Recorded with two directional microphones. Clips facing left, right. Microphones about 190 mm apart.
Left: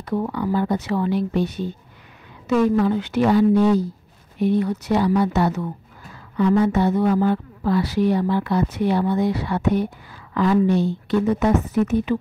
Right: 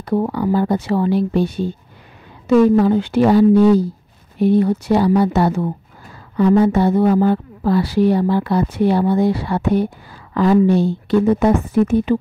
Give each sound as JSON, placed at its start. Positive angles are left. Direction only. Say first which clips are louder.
{"t": 0.0, "sound": "a woman's voice", "louder": "right 5 dB", "side_deg": -35}